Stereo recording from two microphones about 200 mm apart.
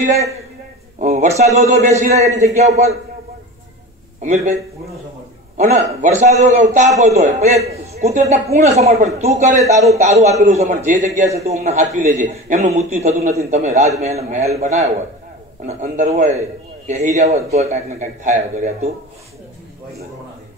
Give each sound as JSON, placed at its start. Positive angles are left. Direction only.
{"t": 0.9, "sound": "a man's voice", "side_deg": -35}
{"t": 4.2, "sound": "a man's voice", "side_deg": -35}
{"t": 5.6, "sound": "a man's voice", "side_deg": -35}